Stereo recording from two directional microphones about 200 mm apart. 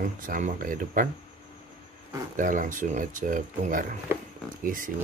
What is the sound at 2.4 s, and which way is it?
Speech, 40° right (ahead or behind).